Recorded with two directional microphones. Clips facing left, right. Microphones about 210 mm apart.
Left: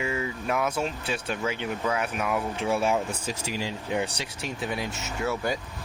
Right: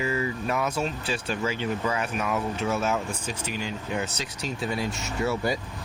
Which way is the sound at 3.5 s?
90° left.